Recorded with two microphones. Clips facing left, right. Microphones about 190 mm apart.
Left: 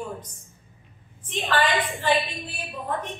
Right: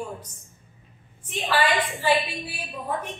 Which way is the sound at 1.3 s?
10° right (ahead or behind).